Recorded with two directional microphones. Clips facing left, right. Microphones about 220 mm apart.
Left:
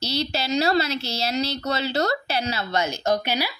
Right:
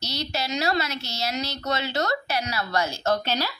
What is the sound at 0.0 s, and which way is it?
A woman's voice, 30° left (ahead or behind).